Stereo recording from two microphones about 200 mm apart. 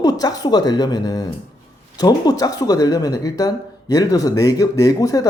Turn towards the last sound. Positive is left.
turn(degrees=20)  # may be behind; listen again after turning